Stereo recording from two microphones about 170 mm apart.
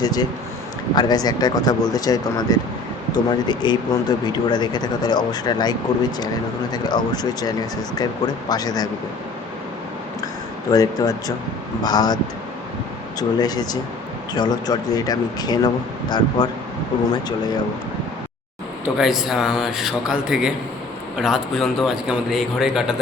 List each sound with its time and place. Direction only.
0.0 s a sound: 25° left (ahead or behind)
0.9 s speech: 25° left (ahead or behind)
10.7 s speech: 20° left (ahead or behind)
18.9 s a man's voice: centre (ahead or behind)